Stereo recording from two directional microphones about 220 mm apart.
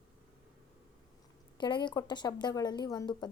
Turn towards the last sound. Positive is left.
turn(degrees=20)  # may be behind; listen again after turning